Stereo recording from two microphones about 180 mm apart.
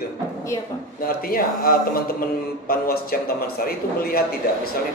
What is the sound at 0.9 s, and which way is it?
A man's voice, 55° left (ahead or behind).